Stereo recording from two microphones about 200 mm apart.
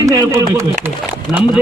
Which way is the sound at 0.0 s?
15° right (ahead or behind).